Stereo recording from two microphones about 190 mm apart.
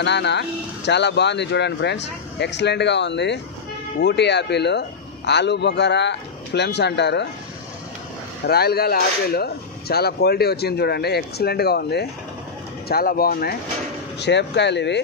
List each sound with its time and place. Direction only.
0.0 s speech: 65° left (ahead or behind)
8.5 s speech: 55° left (ahead or behind)
14.2 s speech: 65° left (ahead or behind)